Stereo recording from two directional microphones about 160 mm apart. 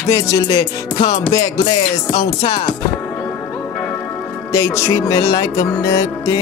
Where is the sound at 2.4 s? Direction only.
40° left (ahead or behind).